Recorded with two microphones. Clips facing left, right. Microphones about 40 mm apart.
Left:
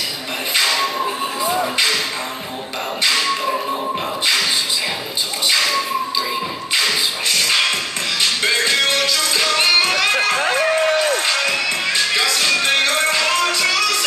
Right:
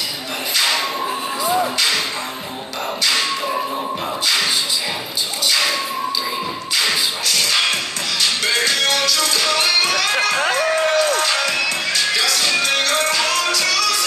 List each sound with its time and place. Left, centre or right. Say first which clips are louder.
8.6 s music: left 1 dB; left
10.5 s a sound: left 1 dB; left
11.3 s music: even; left